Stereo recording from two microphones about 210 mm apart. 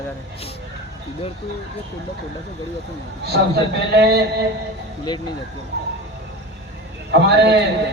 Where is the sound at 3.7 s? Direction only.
55° right (ahead or behind).